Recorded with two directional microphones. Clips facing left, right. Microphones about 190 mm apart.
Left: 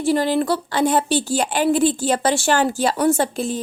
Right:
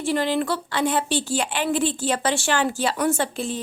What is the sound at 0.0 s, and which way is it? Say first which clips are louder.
A woman's voice: left 4 dB; 40° left (ahead or behind).